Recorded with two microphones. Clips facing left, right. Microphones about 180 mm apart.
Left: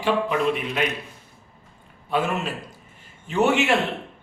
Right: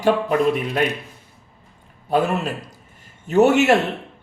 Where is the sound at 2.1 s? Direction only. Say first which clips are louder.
Right 4 dB; 40° right (ahead or behind).